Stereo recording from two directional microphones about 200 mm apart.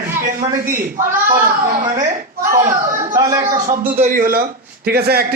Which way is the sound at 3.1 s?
15° right (ahead or behind).